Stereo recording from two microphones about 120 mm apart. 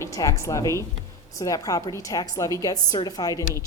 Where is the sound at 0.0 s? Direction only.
25° left (ahead or behind).